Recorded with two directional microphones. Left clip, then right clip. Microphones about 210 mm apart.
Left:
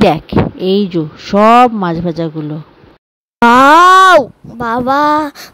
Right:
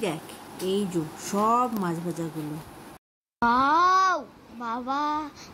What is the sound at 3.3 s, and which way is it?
A child's voice, 50° left (ahead or behind).